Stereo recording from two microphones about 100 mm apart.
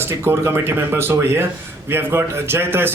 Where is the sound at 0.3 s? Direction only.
25° right (ahead or behind).